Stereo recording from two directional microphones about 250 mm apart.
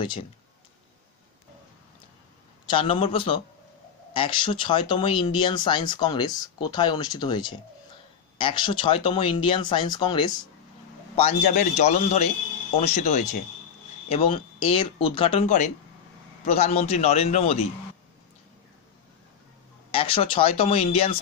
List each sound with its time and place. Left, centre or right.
2.7 s speech: left
11.1 s speech: left
19.9 s speech: left